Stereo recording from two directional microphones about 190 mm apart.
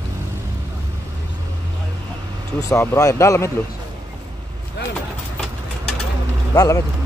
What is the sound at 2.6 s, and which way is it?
Speech, 15° left (ahead or behind).